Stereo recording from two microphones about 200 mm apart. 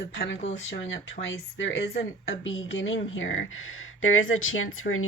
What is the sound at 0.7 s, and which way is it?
Speech, 70° left (ahead or behind).